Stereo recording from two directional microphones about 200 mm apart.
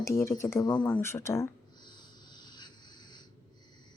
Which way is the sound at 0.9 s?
10° left (ahead or behind).